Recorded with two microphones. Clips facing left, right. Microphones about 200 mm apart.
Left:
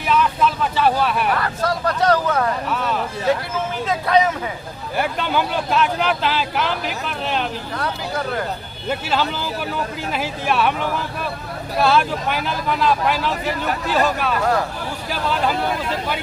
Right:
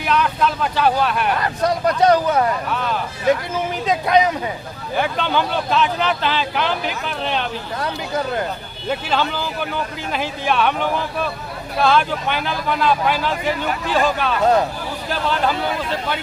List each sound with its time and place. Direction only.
0.1 s speech: centre (ahead or behind)
1.4 s speech: 20° right (ahead or behind)
2.6 s speech: centre (ahead or behind)
3.8 s speech: 15° right (ahead or behind)
4.9 s speech: 5° left (ahead or behind)
7.8 s speech: 20° right (ahead or behind)
8.9 s speech: 5° left (ahead or behind)
11.8 s speech: 5° left (ahead or behind)
14.4 s speech: 20° right (ahead or behind)